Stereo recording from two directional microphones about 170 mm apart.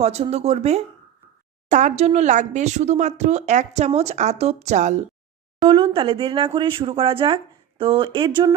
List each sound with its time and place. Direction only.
0.0 s speech: 40° right (ahead or behind)
5.6 s speech: 30° right (ahead or behind)